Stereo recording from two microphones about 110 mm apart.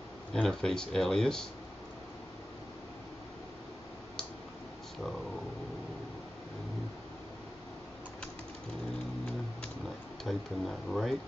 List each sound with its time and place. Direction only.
0.3 s speech: 5° left (ahead or behind)
10.2 s speech: centre (ahead or behind)